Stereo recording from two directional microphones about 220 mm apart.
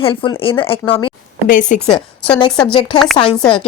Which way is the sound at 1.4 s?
35° left (ahead or behind).